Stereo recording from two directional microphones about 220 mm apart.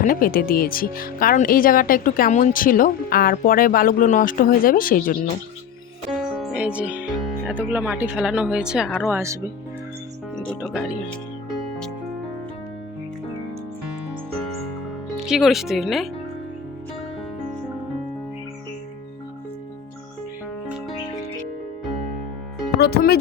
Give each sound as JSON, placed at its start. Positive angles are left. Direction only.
{"t": 0.0, "sound": "speech", "side_deg": 40}
{"t": 6.1, "sound": "music", "side_deg": 0}
{"t": 7.4, "sound": "speech", "side_deg": -10}
{"t": 10.3, "sound": "speech", "side_deg": 5}
{"t": 15.3, "sound": "speech", "side_deg": 0}
{"t": 22.8, "sound": "speech", "side_deg": 45}